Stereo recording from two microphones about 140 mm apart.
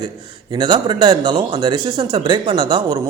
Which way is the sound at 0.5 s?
35° right (ahead or behind).